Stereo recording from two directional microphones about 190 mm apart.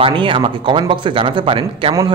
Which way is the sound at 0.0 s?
25° right (ahead or behind).